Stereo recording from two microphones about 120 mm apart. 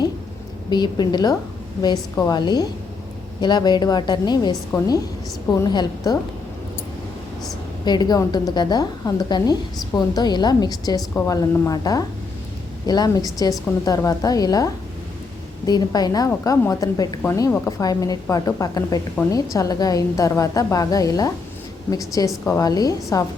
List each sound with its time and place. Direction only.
0.7 s a woman's voice: 35° left (ahead or behind)
7.9 s a woman's voice: 35° left (ahead or behind)